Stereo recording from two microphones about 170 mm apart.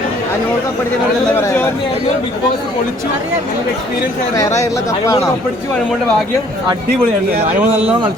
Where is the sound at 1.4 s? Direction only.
15° left (ahead or behind).